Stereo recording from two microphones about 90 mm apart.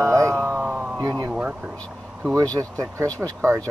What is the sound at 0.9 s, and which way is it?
Speech, 45° right (ahead or behind).